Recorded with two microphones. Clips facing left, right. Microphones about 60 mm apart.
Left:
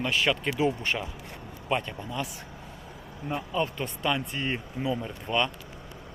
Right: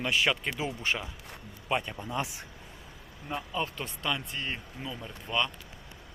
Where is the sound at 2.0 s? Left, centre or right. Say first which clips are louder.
Even; right.